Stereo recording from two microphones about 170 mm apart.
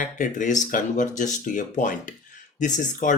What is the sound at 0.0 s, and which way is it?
Speech, 50° left (ahead or behind).